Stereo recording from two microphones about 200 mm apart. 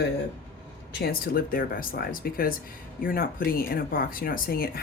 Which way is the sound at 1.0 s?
45° left (ahead or behind).